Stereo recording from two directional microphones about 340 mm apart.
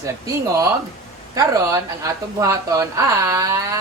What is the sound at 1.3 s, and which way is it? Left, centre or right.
Speech, centre.